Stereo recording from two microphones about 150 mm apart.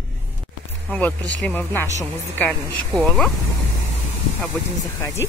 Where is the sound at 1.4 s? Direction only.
10° left (ahead or behind).